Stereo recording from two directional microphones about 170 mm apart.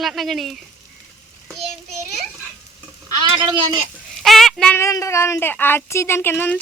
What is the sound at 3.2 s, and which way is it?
Speech, 30° right (ahead or behind).